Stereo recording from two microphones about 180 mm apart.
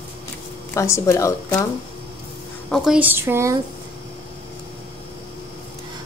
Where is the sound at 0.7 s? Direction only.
15° left (ahead or behind).